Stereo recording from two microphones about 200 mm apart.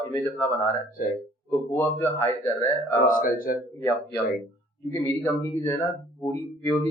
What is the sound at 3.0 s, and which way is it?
Speech, 45° left (ahead or behind).